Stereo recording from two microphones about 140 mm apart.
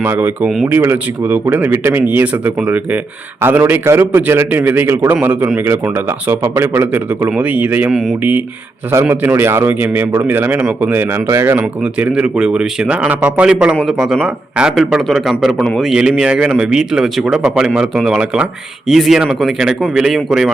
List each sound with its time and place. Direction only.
0.0 s a man's voice: 15° right (ahead or behind)
0.4 s speech: centre (ahead or behind)
0.7 s a man's voice: 15° right (ahead or behind)
11.8 s a man's voice: 10° right (ahead or behind)
17.4 s a man's voice: 10° right (ahead or behind)
17.7 s speech: centre (ahead or behind)